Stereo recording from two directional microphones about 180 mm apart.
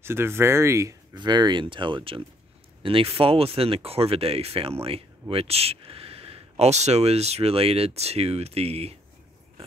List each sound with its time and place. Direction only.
0.0 s speech: 15° right (ahead or behind); by 8.9 s 35° right (ahead or behind)